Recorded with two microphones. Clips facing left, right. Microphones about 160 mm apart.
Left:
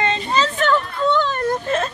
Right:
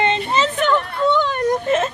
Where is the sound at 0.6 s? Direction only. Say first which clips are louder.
Right 1 dB; 15° right (ahead or behind).